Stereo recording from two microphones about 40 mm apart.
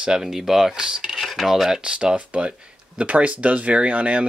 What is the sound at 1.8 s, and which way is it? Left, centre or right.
Speech, right.